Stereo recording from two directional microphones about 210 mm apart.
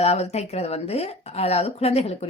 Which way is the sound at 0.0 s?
30° left (ahead or behind).